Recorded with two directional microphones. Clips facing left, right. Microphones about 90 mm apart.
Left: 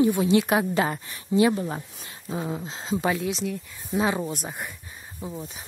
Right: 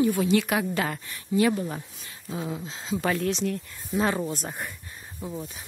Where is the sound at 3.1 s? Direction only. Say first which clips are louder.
Right 1 dB; 5° left (ahead or behind).